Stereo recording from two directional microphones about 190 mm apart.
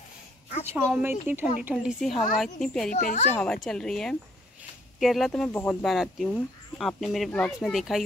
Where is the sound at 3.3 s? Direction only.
5° left (ahead or behind).